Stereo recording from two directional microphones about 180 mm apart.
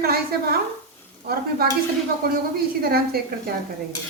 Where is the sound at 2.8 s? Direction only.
60° right (ahead or behind).